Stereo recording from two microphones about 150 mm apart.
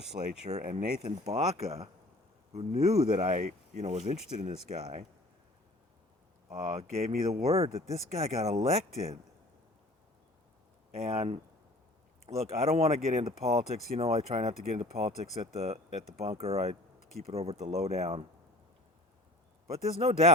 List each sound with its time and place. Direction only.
0.4 s speech: 55° right (ahead or behind)
6.5 s speech: 45° right (ahead or behind)
10.9 s speech: 40° right (ahead or behind)
12.5 s speech: 45° right (ahead or behind)
19.7 s speech: 45° right (ahead or behind)